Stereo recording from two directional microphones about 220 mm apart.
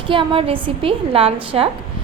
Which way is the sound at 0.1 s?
25° right (ahead or behind).